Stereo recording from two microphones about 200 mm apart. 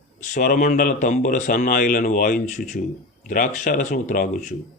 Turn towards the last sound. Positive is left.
turn(degrees=40)  # may be behind; listen again after turning